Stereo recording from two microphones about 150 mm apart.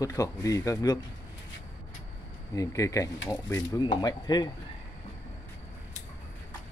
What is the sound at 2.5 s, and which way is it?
Speech, 20° left (ahead or behind).